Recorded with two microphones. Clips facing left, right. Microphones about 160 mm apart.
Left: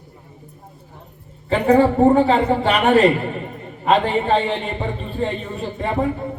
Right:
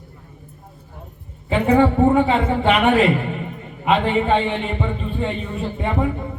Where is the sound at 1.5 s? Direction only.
35° left (ahead or behind).